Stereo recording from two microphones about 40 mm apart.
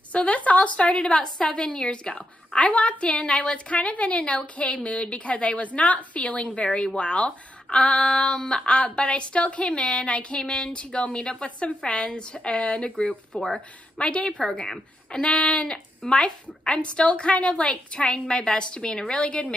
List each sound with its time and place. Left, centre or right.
0.1 s a woman's voice: left
2.1 s a woman's voice: left
8.2 s a woman's voice: centre